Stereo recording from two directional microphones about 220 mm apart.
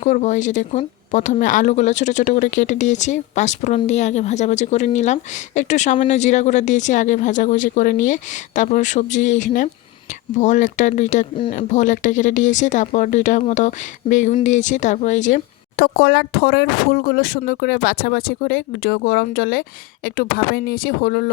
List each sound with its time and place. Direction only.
0.0 s speech: 35° left (ahead or behind)